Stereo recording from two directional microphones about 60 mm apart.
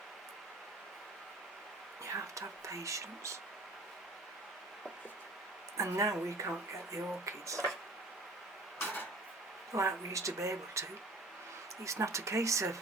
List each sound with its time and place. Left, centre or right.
2.0 s speech: right
5.7 s speech: right
9.7 s speech: right